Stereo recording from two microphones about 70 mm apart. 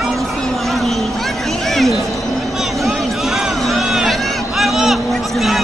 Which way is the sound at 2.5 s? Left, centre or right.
Centre.